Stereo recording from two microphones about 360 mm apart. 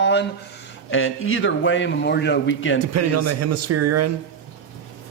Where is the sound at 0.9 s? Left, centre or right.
Left.